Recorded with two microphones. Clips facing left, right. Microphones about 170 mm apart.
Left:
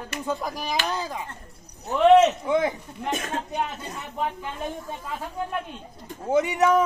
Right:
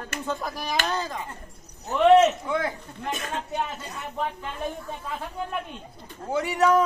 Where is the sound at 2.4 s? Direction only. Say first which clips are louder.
Left 4 dB; 20° left (ahead or behind).